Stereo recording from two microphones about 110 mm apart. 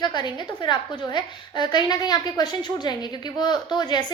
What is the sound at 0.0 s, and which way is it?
A woman's voice, 40° left (ahead or behind).